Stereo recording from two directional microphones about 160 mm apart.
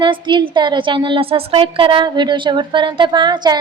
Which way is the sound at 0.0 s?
30° right (ahead or behind).